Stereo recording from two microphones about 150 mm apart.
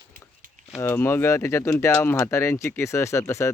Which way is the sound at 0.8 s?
15° left (ahead or behind).